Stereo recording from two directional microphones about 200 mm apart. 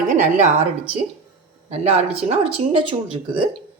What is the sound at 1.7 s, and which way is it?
Speech, 30° right (ahead or behind).